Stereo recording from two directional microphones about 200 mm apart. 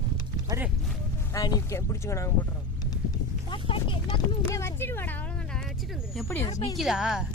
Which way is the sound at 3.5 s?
25° left (ahead or behind).